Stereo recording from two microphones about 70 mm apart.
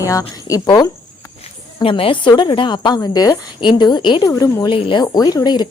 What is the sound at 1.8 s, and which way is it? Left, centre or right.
A woman's voice, left.